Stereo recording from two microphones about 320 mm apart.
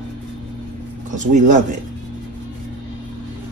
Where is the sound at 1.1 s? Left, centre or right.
Right.